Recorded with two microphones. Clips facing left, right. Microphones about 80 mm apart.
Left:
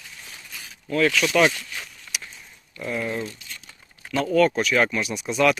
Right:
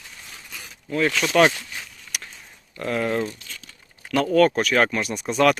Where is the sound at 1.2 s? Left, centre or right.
Right.